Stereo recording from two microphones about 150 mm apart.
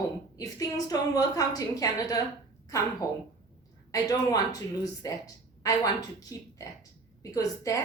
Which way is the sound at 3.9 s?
25° left (ahead or behind).